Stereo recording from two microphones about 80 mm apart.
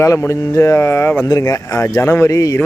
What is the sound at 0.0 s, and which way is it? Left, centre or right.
Speech, left.